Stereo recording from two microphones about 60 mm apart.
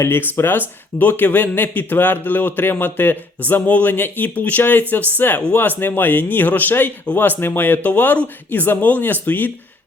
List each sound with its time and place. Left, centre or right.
0.0 s speech: left